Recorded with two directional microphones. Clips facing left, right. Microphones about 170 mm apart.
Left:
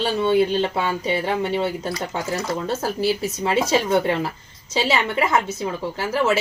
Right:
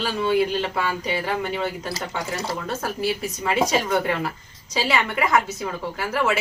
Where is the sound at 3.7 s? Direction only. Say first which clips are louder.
Left 3 dB; 25° left (ahead or behind).